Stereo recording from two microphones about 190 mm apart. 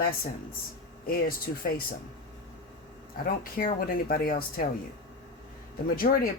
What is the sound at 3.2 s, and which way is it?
Speech, 50° left (ahead or behind).